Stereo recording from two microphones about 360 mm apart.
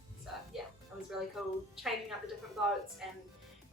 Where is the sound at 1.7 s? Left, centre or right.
Centre.